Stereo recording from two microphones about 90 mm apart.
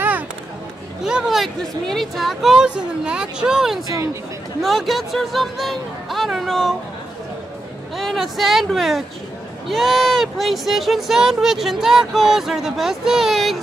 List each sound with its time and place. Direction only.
1.0 s speech: 5° right (ahead or behind)
3.9 s speech: 35° right (ahead or behind)
4.6 s speech: centre (ahead or behind)
7.9 s speech: centre (ahead or behind)